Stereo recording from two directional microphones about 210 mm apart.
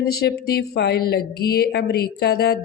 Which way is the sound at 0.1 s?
50° left (ahead or behind).